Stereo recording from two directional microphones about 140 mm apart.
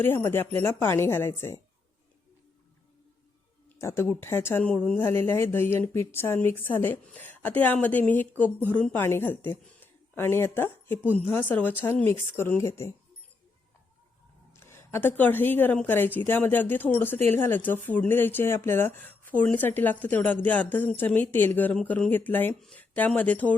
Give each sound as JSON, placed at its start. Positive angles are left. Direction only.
{"t": 0.0, "sound": "speech", "side_deg": 15}
{"t": 3.8, "sound": "speech", "side_deg": 20}
{"t": 14.5, "sound": "speech", "side_deg": 20}